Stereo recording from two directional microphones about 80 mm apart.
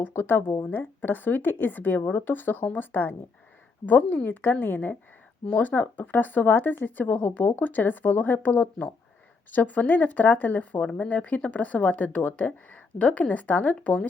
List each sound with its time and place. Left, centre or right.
0.0 s speech: left